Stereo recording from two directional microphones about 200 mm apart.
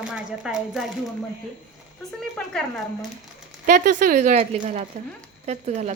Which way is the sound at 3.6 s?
40° right (ahead or behind).